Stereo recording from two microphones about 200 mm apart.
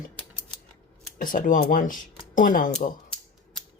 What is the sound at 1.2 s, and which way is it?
Speech, 45° left (ahead or behind).